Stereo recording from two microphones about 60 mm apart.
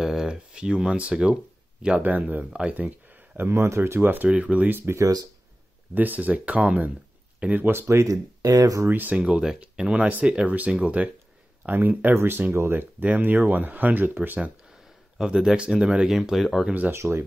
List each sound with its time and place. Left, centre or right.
0.0 s speech: centre; by 2.4 s right
3.3 s speech: right
4.3 s speech: right
4.9 s speech: right
5.9 s speech: right
7.8 s speech: right
8.8 s speech: right
9.1 s speech: centre
15.1 s speech: centre
16.6 s speech: right
16.9 s speech: right